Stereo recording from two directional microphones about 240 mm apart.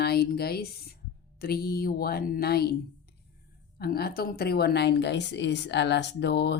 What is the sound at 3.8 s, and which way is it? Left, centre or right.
Speech, left.